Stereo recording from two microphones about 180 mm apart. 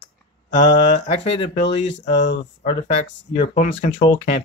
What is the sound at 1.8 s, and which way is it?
Speech, 80° left.